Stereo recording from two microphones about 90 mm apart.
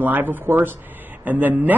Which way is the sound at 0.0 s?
20° right (ahead or behind).